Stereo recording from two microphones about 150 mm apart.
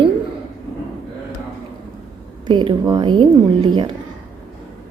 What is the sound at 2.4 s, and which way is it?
A woman's voice, 30° right (ahead or behind).